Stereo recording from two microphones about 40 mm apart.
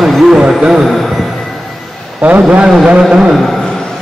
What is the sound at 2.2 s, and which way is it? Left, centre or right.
Speech, right.